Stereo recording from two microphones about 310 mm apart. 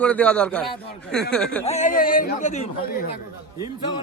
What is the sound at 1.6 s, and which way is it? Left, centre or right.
Speech, left.